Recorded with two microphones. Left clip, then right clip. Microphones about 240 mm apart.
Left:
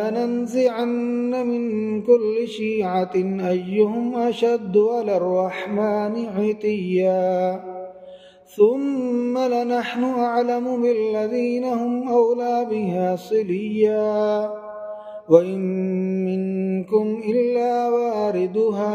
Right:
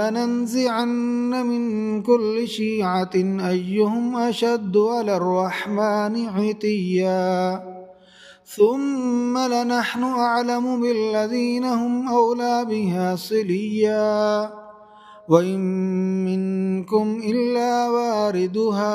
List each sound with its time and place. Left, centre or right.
0.0 s music: right
8.6 s music: right